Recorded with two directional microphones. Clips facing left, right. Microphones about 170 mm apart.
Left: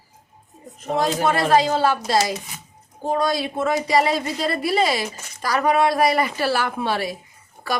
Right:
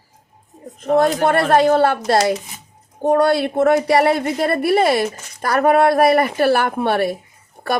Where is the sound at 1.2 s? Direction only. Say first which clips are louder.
Right 4 dB; 60° right (ahead or behind).